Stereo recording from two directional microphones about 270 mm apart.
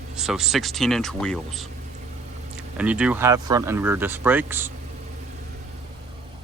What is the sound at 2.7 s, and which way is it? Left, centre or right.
Speech, centre.